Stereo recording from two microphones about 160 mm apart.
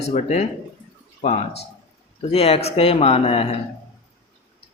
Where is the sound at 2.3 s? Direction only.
40° left (ahead or behind).